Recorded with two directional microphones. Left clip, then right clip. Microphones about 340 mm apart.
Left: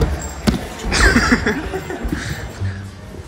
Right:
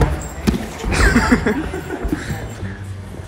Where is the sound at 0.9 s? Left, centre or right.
Centre.